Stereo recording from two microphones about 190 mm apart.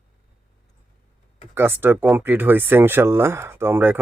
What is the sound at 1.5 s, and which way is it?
Speech, 10° right (ahead or behind).